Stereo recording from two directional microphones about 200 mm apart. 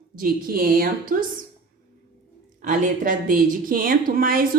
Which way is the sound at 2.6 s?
40° right (ahead or behind).